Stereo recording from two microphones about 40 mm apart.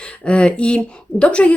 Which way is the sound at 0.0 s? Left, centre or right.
Left.